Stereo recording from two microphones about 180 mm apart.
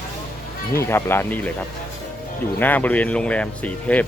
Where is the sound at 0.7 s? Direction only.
15° left (ahead or behind).